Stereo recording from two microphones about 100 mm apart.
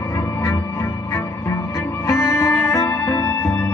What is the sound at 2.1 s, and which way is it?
Music, 30° left (ahead or behind).